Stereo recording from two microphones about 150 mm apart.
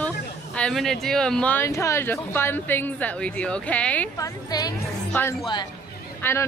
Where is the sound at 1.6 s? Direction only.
20° left (ahead or behind).